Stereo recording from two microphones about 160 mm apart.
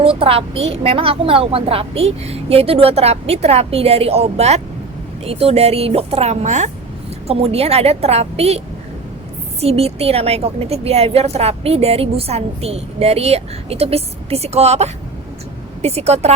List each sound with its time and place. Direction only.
0.0 s a woman's voice: 35° right (ahead or behind)